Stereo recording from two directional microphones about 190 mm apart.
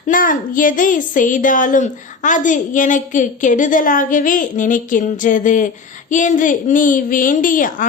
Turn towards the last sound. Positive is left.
turn(degrees=45)  # may be behind; listen again after turning